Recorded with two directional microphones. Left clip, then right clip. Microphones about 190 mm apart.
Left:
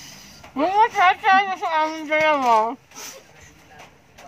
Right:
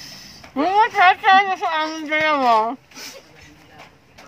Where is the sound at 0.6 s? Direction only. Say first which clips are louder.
Right 2 dB; 10° right (ahead or behind).